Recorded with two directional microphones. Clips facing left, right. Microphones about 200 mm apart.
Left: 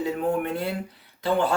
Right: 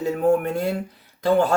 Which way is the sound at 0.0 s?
45° right (ahead or behind).